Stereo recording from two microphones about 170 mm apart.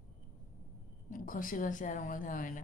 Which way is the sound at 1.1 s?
50° left (ahead or behind).